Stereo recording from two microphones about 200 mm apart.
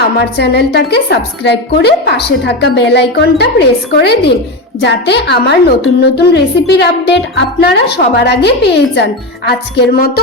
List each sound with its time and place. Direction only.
0.2 s a woman's voice: 55° left (ahead or behind)